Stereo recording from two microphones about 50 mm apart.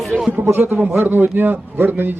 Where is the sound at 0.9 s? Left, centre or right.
Right.